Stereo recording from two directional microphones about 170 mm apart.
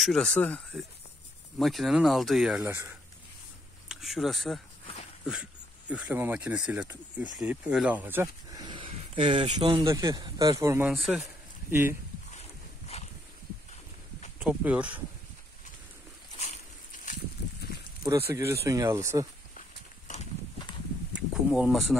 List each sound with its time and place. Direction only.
0.0 s speech: centre (ahead or behind)
2.6 s speech: 15° right (ahead or behind)
3.9 s speech: centre (ahead or behind); by 9.8 s 35° right (ahead or behind)
9.8 s speech: 20° right (ahead or behind)
10.9 s speech: centre (ahead or behind)
11.7 s speech: 15° right (ahead or behind)
12.3 s boat: 40° left (ahead or behind)
14.4 s speech: 10° right (ahead or behind)
16.3 s a sound: 45° left (ahead or behind)
18.3 s speech: 15° right (ahead or behind)
21.3 s speech: 5° right (ahead or behind)